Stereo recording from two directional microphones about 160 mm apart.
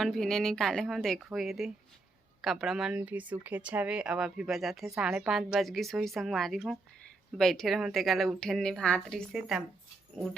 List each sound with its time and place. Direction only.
0.0 s speech: centre (ahead or behind)